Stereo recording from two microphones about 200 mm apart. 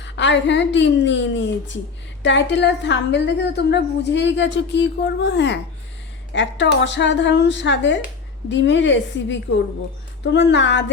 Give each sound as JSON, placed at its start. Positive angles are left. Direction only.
{"t": 0.0, "sound": "a woman's voice", "side_deg": 65}